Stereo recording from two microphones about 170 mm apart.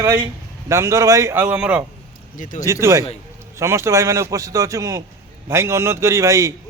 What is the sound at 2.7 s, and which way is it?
A man's voice, 15° right (ahead or behind).